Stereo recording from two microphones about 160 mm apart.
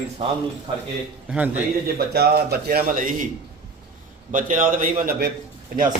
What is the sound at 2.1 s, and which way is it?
A man's voice, 80° right.